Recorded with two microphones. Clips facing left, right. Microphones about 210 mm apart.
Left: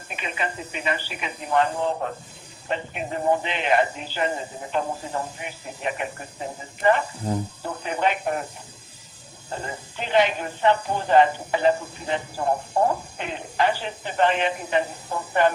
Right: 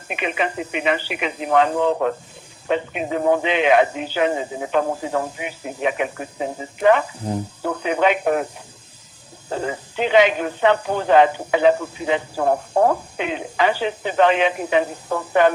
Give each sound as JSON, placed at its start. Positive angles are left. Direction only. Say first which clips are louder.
{"t": 0.1, "sound": "speech", "louder": "right 7 dB", "side_deg": -70}
{"t": 7.6, "sound": "speech", "louder": "right 9 dB", "side_deg": -75}
{"t": 9.5, "sound": "speech", "louder": "right 8 dB", "side_deg": -80}